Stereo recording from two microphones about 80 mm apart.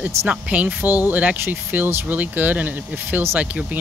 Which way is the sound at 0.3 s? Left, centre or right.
Centre.